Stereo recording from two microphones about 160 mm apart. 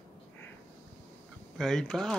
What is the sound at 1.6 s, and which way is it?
Speech, centre (ahead or behind).